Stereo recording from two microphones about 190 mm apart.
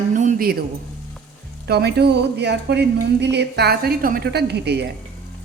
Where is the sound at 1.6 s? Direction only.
60° right (ahead or behind).